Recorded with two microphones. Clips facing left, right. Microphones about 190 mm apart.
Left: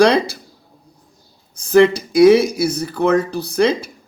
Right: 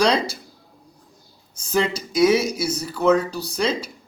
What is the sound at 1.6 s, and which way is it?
Speech, 55° left (ahead or behind).